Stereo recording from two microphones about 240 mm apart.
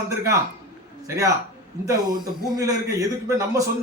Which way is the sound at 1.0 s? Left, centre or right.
Centre.